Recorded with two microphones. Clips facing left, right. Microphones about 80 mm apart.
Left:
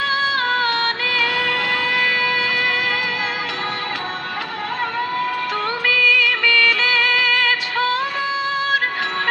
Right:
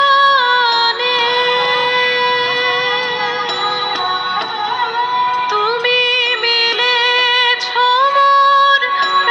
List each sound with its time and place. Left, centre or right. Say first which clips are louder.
0.0 s music: right 10 dB; right
5.8 s music of bollywood: right 2 dB; right